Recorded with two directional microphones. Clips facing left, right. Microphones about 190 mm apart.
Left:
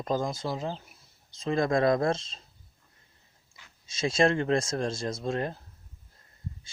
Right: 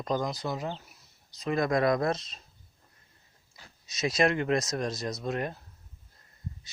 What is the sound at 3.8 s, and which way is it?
Speech, 30° left (ahead or behind).